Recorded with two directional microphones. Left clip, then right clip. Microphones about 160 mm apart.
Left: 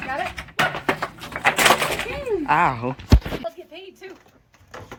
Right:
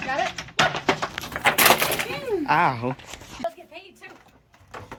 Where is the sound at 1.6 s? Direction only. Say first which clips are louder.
Left 1 dB; 5° right (ahead or behind).